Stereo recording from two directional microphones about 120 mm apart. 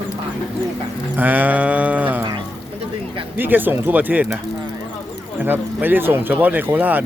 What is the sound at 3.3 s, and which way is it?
Speech, 15° right (ahead or behind).